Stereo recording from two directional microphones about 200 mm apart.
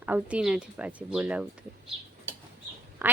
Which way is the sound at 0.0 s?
5° right (ahead or behind).